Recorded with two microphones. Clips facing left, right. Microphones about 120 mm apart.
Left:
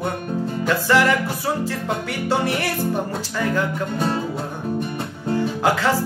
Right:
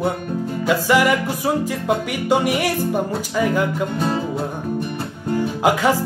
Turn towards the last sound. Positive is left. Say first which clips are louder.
# right 2 dB
turn(degrees=-15)  # may be behind; listen again after turning